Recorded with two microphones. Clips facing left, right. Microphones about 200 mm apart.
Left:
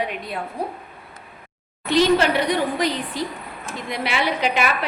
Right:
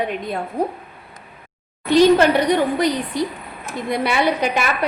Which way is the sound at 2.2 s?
55° right (ahead or behind).